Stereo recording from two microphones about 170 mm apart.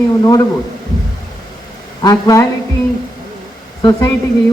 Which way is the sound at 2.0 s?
20° left (ahead or behind).